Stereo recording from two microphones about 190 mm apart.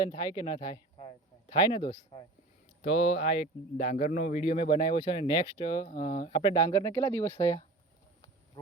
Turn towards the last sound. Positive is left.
turn(degrees=15)  # may be behind; listen again after turning